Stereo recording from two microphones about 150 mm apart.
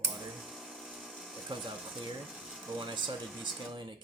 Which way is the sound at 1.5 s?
35° right (ahead or behind).